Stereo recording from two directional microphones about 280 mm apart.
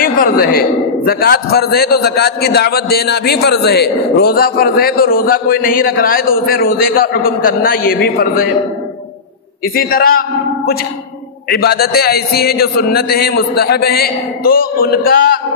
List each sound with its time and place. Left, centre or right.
0.0 s a man's voice: left
9.8 s a man's voice: left
11.5 s a man's voice: left